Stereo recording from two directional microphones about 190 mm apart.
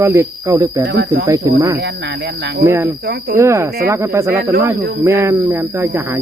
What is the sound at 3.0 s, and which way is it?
Cricket, 55° right (ahead or behind).